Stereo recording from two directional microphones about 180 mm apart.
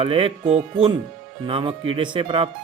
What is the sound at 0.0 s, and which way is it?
Speech, 30° right (ahead or behind).